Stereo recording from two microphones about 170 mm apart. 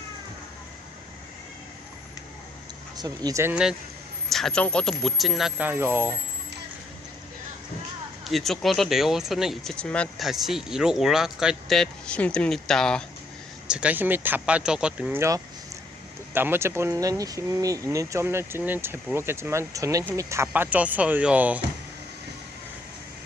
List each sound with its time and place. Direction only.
3.0 s speech: 20° right (ahead or behind)
3.5 s speech: 5° right (ahead or behind)
8.2 s speech: centre (ahead or behind)
13.7 s speech: 5° right (ahead or behind)
16.3 s speech: 15° right (ahead or behind)